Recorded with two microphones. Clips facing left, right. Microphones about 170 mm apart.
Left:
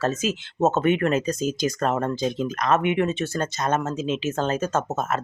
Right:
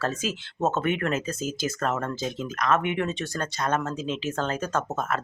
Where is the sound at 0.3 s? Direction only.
25° left (ahead or behind).